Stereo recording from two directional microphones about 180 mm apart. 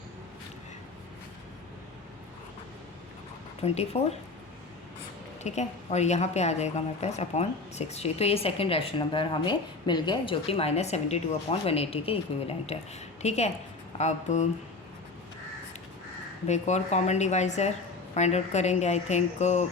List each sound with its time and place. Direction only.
3.9 s a woman's voice: 35° left (ahead or behind)
5.4 s a woman's voice: 40° left (ahead or behind)
16.5 s a woman's voice: 40° left (ahead or behind)